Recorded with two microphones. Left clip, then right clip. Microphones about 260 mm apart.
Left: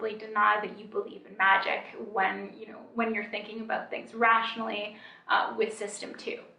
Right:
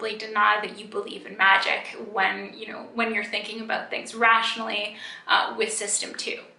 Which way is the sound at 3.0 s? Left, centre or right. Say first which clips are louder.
Right 5 dB; centre.